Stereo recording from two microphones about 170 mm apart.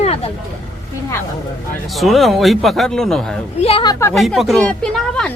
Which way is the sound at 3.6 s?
30° left (ahead or behind).